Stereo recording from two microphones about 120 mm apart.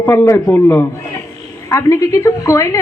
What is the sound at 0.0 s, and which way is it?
A woman's voice, 20° left (ahead or behind).